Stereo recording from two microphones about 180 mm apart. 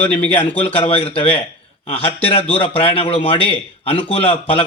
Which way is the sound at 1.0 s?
30° left (ahead or behind).